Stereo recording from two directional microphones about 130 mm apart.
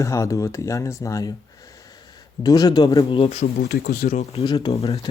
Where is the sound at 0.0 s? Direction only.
25° left (ahead or behind).